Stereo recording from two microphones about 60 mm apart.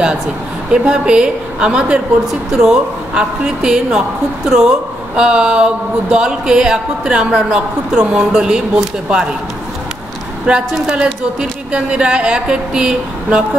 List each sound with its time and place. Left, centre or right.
0.7 s speech: centre
10.4 s speech: centre